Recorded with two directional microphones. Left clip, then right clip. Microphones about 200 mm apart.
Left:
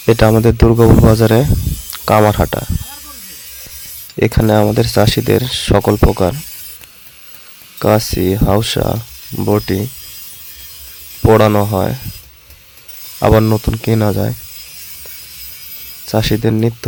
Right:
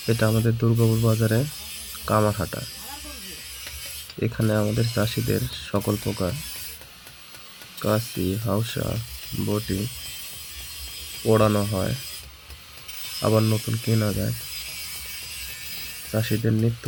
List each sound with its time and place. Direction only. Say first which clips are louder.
0.0 s speech: left 14 dB; 60° left (ahead or behind)
4.2 s speech: left 13 dB; 55° left (ahead or behind)
7.8 s speech: left 12 dB; 60° left (ahead or behind)
11.3 s speech: left 11 dB; 55° left (ahead or behind)
13.4 s speech: left 11 dB; 50° left (ahead or behind)
16.1 s speech: left 11 dB; 60° left (ahead or behind)